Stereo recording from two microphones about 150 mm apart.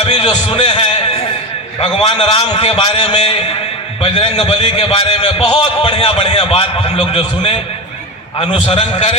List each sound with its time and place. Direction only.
0.0 s a man's voice: 30° left (ahead or behind)